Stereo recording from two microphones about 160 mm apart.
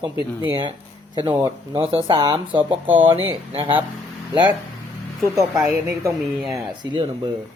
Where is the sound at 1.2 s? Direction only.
15° right (ahead or behind).